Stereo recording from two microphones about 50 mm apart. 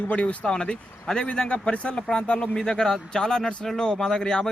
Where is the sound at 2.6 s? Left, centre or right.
Centre.